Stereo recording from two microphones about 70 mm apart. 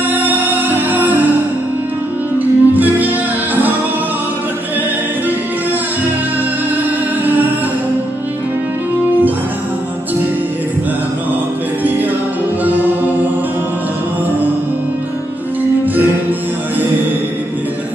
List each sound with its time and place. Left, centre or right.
0.1 s music: right
2.3 s music: right
7.2 s music: right